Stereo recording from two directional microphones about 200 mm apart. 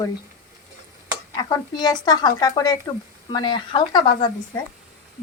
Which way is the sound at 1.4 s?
20° left (ahead or behind).